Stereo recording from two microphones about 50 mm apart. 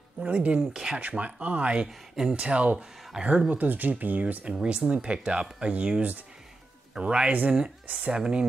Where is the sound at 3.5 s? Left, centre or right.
Right.